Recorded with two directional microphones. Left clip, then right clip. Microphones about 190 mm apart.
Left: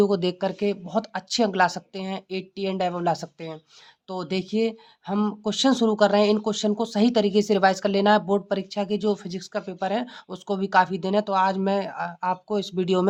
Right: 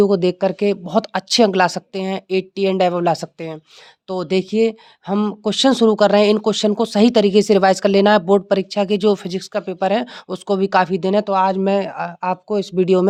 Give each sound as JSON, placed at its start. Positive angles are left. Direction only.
{"t": 0.0, "sound": "speech", "side_deg": -30}